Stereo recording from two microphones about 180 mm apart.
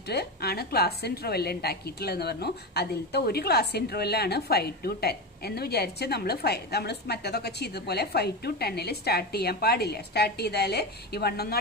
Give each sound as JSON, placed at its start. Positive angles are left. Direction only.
{"t": 0.1, "sound": "a woman's voice", "side_deg": 60}